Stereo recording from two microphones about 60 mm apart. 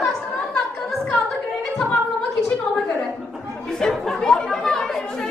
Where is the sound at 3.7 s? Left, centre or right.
Centre.